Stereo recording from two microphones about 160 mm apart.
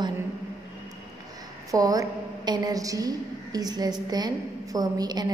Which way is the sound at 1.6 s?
20° right (ahead or behind).